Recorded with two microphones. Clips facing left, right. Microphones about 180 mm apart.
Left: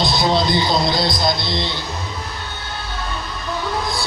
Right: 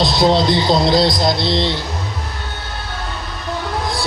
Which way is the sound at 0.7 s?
90° right.